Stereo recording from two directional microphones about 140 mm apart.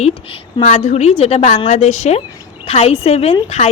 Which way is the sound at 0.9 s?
50° left (ahead or behind).